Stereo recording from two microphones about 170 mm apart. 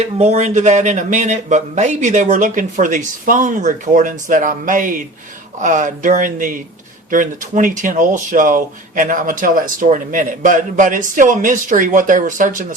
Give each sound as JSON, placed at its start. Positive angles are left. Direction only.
{"t": 0.0, "sound": "speech", "side_deg": -40}